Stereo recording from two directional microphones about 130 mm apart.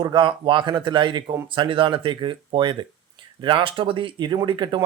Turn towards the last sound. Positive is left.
turn(degrees=-35)  # may be behind; listen again after turning